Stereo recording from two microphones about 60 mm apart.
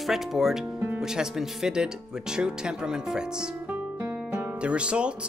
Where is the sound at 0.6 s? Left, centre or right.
Right.